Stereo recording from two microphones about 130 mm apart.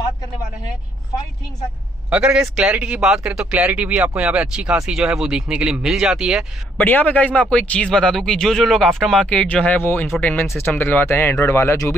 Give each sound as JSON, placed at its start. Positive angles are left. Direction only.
{"t": 2.0, "sound": "a man's voice", "side_deg": -10}
{"t": 6.8, "sound": "speech", "side_deg": 15}